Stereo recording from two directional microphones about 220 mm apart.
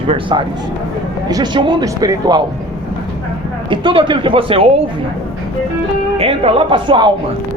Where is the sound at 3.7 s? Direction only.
20° right (ahead or behind).